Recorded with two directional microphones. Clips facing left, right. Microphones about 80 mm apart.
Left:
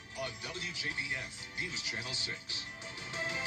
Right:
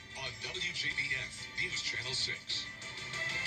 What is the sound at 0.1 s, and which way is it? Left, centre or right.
Music, left.